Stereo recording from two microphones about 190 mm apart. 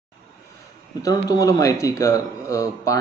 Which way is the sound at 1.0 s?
20° left (ahead or behind).